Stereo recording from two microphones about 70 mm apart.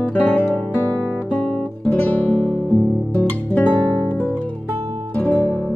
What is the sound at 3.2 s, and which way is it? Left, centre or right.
Music, left.